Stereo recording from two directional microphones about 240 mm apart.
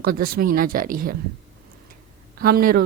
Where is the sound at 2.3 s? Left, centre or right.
Right.